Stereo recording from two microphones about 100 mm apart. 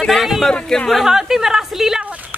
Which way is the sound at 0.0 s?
Centre (ahead or behind).